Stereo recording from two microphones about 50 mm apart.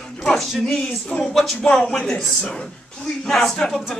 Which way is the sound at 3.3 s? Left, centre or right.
Centre.